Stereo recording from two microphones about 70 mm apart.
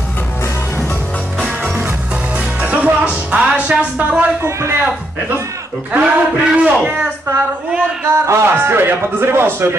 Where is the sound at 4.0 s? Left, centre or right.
Right.